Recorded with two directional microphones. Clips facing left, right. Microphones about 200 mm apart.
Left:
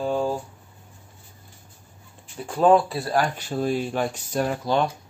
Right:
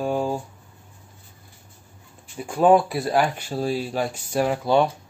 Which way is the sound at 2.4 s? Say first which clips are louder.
Right 1 dB; 10° right (ahead or behind).